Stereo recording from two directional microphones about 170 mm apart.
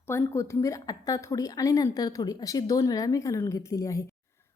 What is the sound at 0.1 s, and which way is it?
A woman's voice, 15° left (ahead or behind).